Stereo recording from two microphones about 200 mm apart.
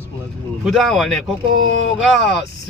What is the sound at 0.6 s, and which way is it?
Speech, centre (ahead or behind).